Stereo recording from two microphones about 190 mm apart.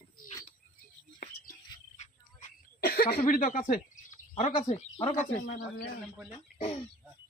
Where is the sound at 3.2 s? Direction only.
40° left (ahead or behind).